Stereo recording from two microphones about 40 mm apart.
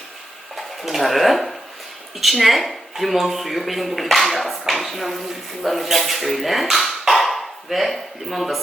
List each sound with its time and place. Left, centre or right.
0.5 s speech: centre
4.7 s dishes: centre
5.6 s speech: centre
7.1 s dog: centre